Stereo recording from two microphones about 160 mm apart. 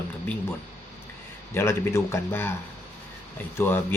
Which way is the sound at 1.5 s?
15° left (ahead or behind).